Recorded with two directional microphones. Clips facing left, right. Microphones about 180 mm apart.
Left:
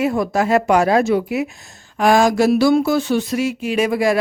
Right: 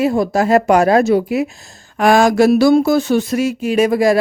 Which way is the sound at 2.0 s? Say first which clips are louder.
Right 3 dB; 65° right (ahead or behind).